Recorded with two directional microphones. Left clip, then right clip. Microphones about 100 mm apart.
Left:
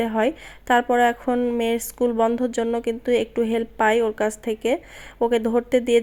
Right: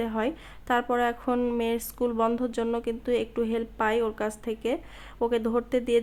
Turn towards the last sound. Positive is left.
turn(degrees=35)  # may be behind; listen again after turning